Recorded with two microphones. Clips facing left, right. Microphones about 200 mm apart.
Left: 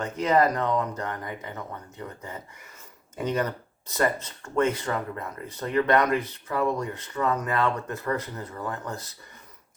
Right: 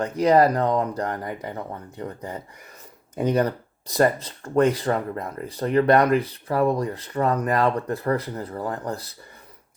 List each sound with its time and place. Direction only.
0.0 s speech: 35° right (ahead or behind)